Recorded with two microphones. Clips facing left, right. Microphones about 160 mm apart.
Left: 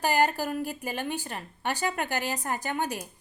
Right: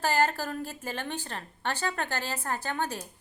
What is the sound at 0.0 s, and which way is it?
A woman's voice, 15° left (ahead or behind).